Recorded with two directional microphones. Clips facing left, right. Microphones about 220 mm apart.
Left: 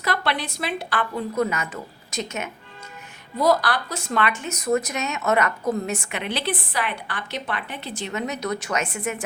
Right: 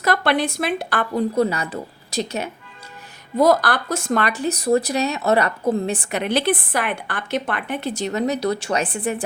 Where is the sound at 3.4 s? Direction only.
50° right (ahead or behind); by 9.2 s 30° right (ahead or behind).